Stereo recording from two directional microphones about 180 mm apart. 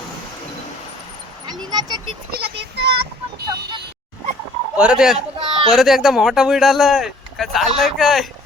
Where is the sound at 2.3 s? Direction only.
65° right (ahead or behind).